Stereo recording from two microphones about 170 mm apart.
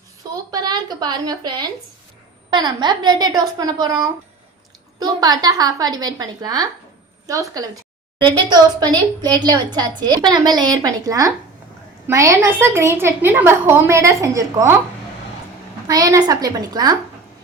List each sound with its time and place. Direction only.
0.5 s a woman's voice: 25° right (ahead or behind)
4.9 s a woman's voice: 25° right (ahead or behind)
15.9 s a woman's voice: 20° right (ahead or behind)